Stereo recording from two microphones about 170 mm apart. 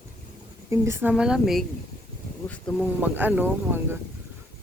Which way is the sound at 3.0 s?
10° right (ahead or behind).